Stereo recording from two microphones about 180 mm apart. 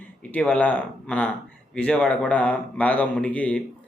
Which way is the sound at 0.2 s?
10° left (ahead or behind).